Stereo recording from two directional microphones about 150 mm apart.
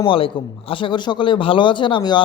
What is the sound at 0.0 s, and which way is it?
Speech, 35° left (ahead or behind).